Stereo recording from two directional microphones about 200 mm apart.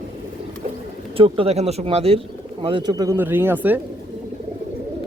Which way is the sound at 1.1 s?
25° right (ahead or behind).